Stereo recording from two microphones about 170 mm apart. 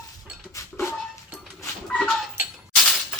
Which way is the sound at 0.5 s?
20° left (ahead or behind).